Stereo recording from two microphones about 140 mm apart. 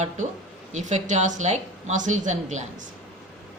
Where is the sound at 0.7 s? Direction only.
55° right (ahead or behind).